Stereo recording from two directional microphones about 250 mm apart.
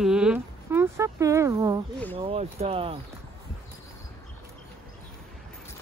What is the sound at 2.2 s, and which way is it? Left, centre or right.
Speech, right.